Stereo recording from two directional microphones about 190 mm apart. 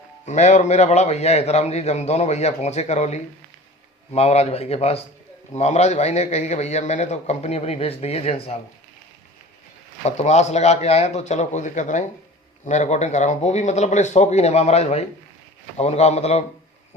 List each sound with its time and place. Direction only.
0.3 s a man's voice: 40° left (ahead or behind)
10.0 s a man's voice: 35° left (ahead or behind)